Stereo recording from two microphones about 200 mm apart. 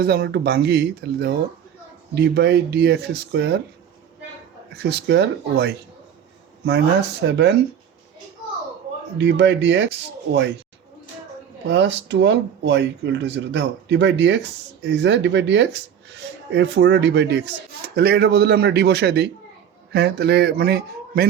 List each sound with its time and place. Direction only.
0.0 s speech: 55° right (ahead or behind)
4.7 s speech: 55° right (ahead or behind)
9.1 s speech: 60° right (ahead or behind)
11.7 s a man's voice: 65° right (ahead or behind)